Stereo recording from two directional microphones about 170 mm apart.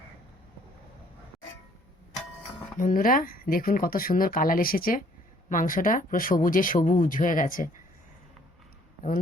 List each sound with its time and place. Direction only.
2.7 s speech: 50° left (ahead or behind)